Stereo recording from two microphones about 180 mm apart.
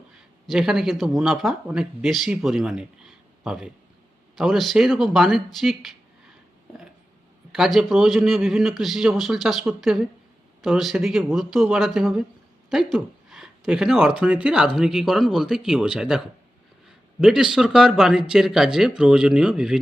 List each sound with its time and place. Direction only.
0.4 s speech: centre (ahead or behind)
7.5 s speech: centre (ahead or behind)